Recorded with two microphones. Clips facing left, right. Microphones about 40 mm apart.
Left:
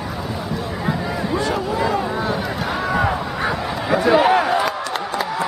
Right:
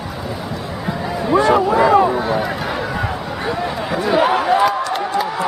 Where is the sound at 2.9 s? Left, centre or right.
Centre.